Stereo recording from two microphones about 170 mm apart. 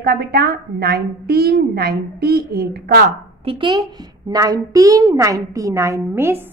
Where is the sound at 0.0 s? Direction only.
65° right (ahead or behind).